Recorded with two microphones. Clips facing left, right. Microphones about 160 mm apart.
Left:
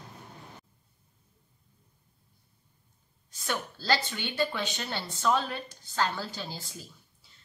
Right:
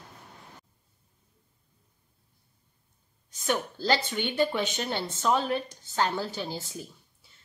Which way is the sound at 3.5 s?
20° right (ahead or behind).